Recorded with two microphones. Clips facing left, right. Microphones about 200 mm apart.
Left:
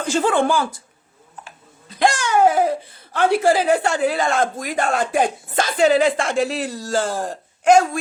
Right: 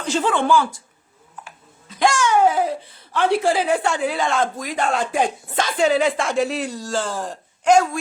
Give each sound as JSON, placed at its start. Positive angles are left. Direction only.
{"t": 0.0, "sound": "speech", "side_deg": 45}
{"t": 2.0, "sound": "speech", "side_deg": 40}
{"t": 5.7, "sound": "a woman's voice", "side_deg": 0}
{"t": 6.7, "sound": "speech", "side_deg": 40}